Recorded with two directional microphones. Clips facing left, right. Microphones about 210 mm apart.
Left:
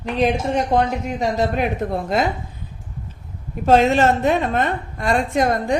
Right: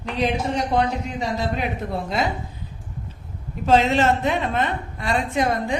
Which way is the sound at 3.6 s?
45° left (ahead or behind).